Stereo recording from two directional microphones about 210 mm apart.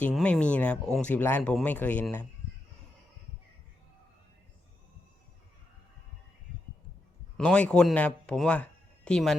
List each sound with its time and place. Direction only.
0.0 s speech: 5° left (ahead or behind)
7.3 s speech: 5° left (ahead or behind)